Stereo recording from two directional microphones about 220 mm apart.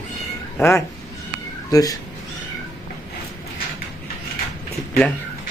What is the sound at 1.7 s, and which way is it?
Speech, 15° left (ahead or behind).